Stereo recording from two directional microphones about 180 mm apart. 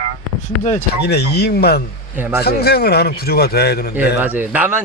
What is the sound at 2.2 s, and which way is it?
Speech, 10° right (ahead or behind).